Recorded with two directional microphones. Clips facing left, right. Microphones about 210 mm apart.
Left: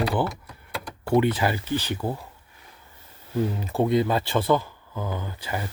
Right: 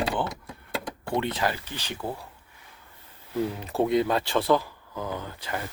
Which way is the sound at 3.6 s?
Centre (ahead or behind).